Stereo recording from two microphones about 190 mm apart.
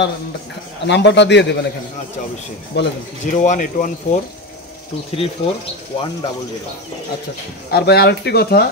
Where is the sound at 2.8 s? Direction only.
65° left (ahead or behind).